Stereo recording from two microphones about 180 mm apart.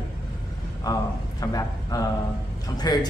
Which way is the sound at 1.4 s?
20° left (ahead or behind).